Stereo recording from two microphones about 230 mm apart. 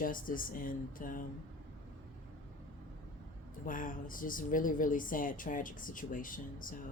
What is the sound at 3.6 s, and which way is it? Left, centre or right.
Speech, left.